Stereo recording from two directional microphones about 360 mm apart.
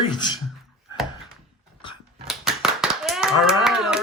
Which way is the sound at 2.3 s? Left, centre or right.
Centre.